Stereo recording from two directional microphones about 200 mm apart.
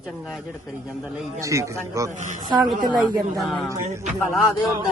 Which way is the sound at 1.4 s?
15° right (ahead or behind).